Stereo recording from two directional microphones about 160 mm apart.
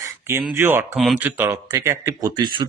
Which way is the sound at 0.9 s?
5° right (ahead or behind).